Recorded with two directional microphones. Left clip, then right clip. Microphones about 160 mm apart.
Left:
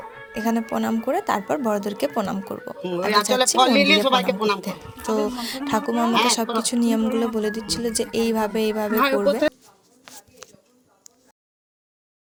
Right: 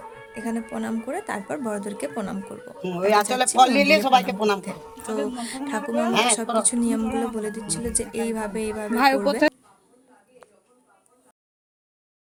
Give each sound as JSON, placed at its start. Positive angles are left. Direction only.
{"t": 0.0, "sound": "music", "side_deg": 15}
{"t": 1.0, "sound": "a woman's voice", "side_deg": 15}
{"t": 3.1, "sound": "speech", "side_deg": -50}
{"t": 4.6, "sound": "a woman's voice", "side_deg": 10}